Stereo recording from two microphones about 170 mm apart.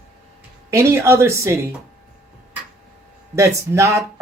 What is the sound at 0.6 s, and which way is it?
Speech, 15° right (ahead or behind).